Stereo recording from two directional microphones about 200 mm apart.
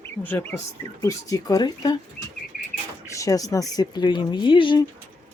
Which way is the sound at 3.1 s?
15° left (ahead or behind).